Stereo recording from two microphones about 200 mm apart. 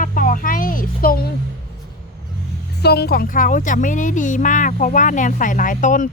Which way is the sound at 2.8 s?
55° left (ahead or behind).